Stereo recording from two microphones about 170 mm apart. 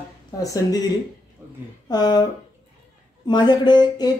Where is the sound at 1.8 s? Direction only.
25° left (ahead or behind).